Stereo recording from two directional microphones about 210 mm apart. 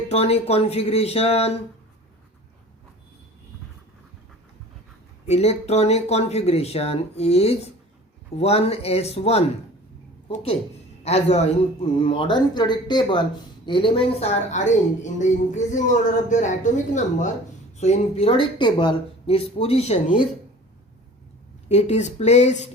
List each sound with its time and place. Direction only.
0.1 s speech: 30° left (ahead or behind)
5.2 s a man's voice: 30° left (ahead or behind)
21.7 s a man's voice: 30° left (ahead or behind)